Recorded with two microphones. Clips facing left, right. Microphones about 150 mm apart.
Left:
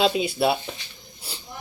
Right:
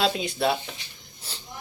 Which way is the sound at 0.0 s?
5° left (ahead or behind).